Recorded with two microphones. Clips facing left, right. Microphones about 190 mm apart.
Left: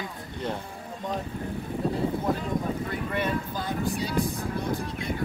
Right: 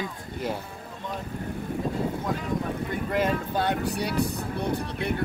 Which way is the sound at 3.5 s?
70° right (ahead or behind).